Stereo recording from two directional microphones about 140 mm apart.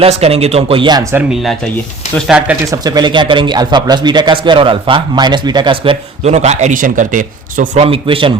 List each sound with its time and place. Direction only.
0.0 s speech: 45° right (ahead or behind)
1.3 s speech: centre (ahead or behind)
2.6 s speech: 30° right (ahead or behind)
6.3 s speech: 55° right (ahead or behind)
7.8 s speech: 40° right (ahead or behind)